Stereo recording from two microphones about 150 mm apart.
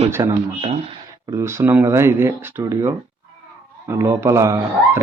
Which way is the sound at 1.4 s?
20° right (ahead or behind).